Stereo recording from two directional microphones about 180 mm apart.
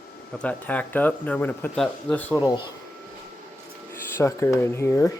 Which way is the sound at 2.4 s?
20° left (ahead or behind).